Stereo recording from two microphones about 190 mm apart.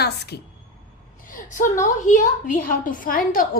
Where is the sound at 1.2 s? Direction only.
45° left (ahead or behind).